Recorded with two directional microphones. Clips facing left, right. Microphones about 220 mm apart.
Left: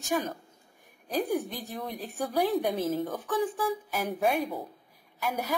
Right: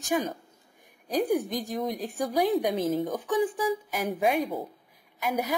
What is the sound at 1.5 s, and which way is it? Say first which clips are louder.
Speech: right 7 dB; 15° right (ahead or behind).